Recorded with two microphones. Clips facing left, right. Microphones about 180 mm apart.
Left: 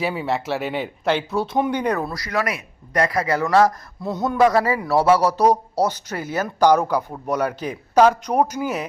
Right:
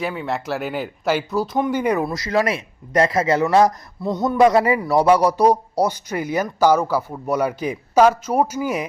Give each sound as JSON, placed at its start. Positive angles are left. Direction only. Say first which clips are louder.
{"t": 0.0, "sound": "speech", "louder": "left 1 dB", "side_deg": 5}
{"t": 2.2, "sound": "a man's voice", "louder": "right 4 dB", "side_deg": -25}
{"t": 4.0, "sound": "speech", "louder": "right 2 dB", "side_deg": 10}
{"t": 4.4, "sound": "a man's voice", "louder": "right 2 dB", "side_deg": -20}